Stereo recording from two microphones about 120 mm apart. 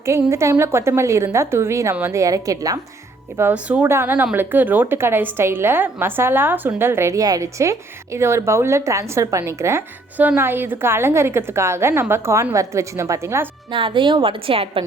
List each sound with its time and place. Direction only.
0.0 s a woman's voice: 25° right (ahead or behind)
3.5 s a woman's voice: 10° right (ahead or behind)
13.7 s a woman's voice: 45° right (ahead or behind)